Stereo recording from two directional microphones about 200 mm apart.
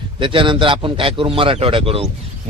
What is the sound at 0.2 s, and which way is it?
A man's voice, 25° right (ahead or behind).